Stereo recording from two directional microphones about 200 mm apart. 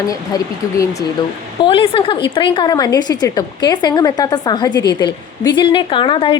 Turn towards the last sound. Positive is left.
turn(degrees=25)  # may be behind; listen again after turning